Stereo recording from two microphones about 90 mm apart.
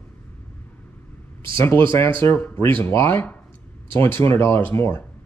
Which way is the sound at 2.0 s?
30° left (ahead or behind).